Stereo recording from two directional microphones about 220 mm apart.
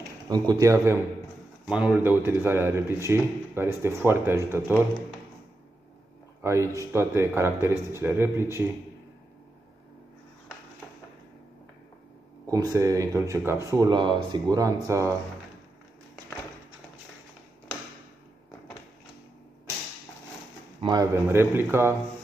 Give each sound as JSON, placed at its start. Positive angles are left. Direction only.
{"t": 0.3, "sound": "speech", "side_deg": -15}
{"t": 6.4, "sound": "speech", "side_deg": -15}
{"t": 12.4, "sound": "speech", "side_deg": -15}
{"t": 20.8, "sound": "speech", "side_deg": -15}